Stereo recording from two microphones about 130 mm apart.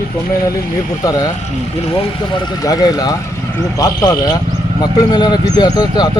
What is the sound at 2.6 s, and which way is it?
Speech, 30° left (ahead or behind).